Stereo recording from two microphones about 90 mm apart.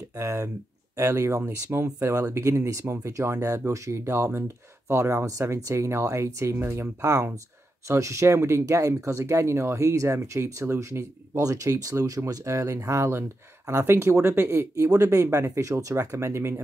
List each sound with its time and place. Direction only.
0.2 s speech: 35° right (ahead or behind)